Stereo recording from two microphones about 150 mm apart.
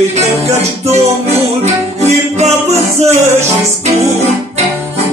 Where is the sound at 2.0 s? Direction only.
45° right (ahead or behind).